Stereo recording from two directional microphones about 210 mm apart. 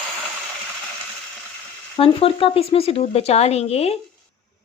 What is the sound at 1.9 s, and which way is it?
Speech, 25° left (ahead or behind).